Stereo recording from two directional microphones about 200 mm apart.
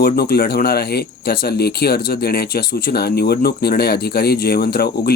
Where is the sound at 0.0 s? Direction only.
50° left (ahead or behind).